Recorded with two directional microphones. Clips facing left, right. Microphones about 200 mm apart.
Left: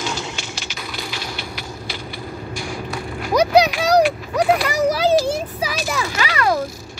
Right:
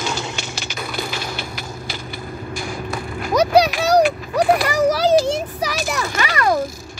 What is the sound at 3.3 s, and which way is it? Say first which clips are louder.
Vehicle: even; 10° left (ahead or behind).